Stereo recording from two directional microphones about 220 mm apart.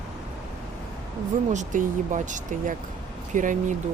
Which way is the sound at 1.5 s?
35° right (ahead or behind).